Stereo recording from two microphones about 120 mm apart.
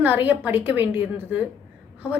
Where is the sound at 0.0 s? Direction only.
15° right (ahead or behind).